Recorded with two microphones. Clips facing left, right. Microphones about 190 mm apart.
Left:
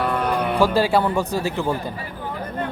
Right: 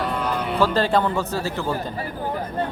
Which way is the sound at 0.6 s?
10° left (ahead or behind).